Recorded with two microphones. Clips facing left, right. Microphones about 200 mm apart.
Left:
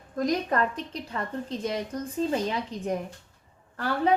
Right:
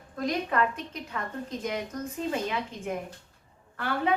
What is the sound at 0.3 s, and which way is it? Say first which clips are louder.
A woman's voice: left 1 dB; 40° left (ahead or behind).